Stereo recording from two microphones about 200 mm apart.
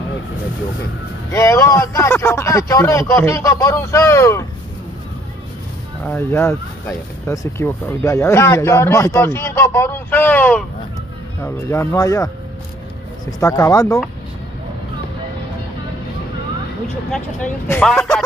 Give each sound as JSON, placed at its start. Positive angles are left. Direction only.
{"t": 1.3, "sound": "speech", "side_deg": 15}
{"t": 6.0, "sound": "speech", "side_deg": 10}
{"t": 17.1, "sound": "speech", "side_deg": 10}